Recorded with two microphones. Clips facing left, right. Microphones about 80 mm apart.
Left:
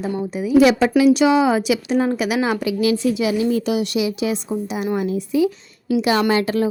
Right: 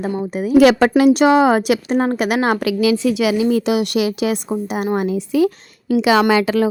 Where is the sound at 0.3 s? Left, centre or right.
Right.